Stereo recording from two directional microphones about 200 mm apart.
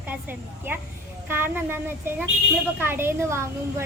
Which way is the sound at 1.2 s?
10° right (ahead or behind).